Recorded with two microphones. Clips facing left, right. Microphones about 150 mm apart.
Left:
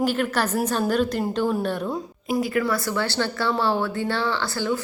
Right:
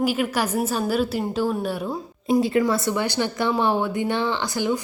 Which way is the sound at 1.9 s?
25° right (ahead or behind).